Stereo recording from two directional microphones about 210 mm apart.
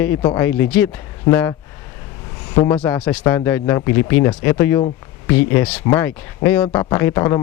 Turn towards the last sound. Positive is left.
turn(degrees=15)  # may be behind; listen again after turning